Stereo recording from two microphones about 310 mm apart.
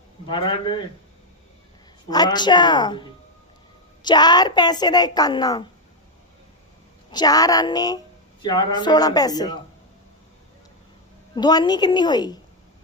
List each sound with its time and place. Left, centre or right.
0.3 s a woman's voice: centre
2.0 s a woman's voice: centre
7.1 s a woman's voice: centre
11.3 s a woman's voice: centre